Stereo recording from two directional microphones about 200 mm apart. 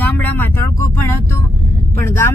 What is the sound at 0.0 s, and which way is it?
Vehicle, 10° left (ahead or behind).